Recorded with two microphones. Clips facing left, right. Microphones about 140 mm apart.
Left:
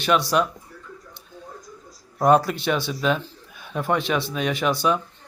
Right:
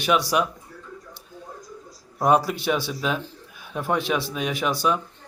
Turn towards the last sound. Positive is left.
turn(degrees=-5)  # may be behind; listen again after turning